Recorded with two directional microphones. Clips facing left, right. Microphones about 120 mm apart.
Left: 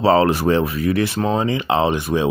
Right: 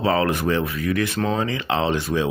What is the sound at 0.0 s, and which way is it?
Speech, 30° left (ahead or behind).